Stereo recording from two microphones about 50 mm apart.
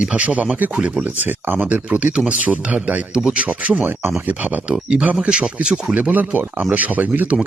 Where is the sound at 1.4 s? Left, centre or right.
Right.